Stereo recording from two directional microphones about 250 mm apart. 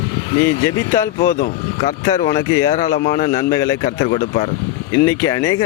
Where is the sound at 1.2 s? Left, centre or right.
Left.